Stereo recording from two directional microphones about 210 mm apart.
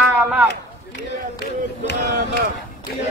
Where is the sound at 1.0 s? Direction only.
55° left (ahead or behind).